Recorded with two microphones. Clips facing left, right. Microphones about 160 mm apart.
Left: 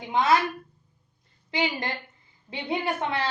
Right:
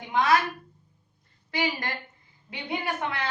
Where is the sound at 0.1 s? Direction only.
25° left (ahead or behind).